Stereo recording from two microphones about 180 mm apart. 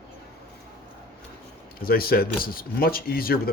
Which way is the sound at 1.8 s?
55° left (ahead or behind).